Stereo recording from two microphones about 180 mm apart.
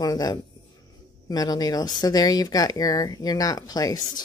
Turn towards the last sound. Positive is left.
turn(degrees=20)  # may be behind; listen again after turning